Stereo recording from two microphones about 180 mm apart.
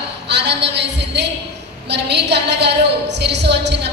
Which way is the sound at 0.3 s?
70° right (ahead or behind).